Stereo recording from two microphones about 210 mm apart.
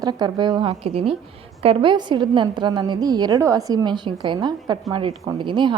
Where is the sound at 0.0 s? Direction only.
20° right (ahead or behind).